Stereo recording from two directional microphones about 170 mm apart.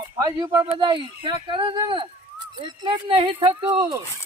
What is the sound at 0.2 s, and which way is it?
Speech, 20° right (ahead or behind).